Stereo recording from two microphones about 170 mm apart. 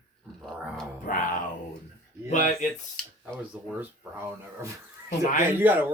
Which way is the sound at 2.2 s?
45° left (ahead or behind).